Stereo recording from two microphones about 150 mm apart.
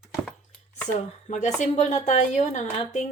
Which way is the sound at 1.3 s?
50° left (ahead or behind).